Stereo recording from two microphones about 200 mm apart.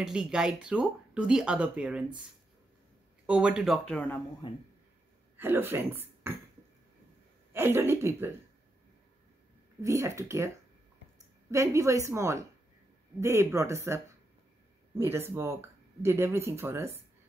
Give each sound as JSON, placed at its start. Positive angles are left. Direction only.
{"t": 0.0, "sound": "speech", "side_deg": -5}
{"t": 3.3, "sound": "speech", "side_deg": -5}
{"t": 4.4, "sound": "speech", "side_deg": 25}
{"t": 5.4, "sound": "speech", "side_deg": -10}
{"t": 7.5, "sound": "a woman's voice", "side_deg": -10}
{"t": 9.8, "sound": "a woman's voice", "side_deg": -15}
{"t": 11.5, "sound": "a woman's voice", "side_deg": -15}